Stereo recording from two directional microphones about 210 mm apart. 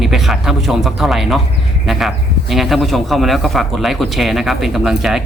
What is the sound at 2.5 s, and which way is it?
Speech, centre (ahead or behind).